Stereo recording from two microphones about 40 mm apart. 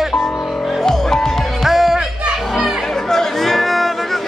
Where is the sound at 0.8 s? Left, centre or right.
Centre.